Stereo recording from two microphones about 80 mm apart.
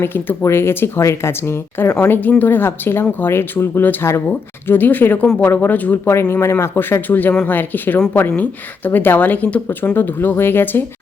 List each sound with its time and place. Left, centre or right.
0.0 s a woman's voice: left